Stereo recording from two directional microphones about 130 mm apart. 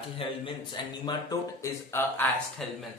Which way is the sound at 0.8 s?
35° left (ahead or behind).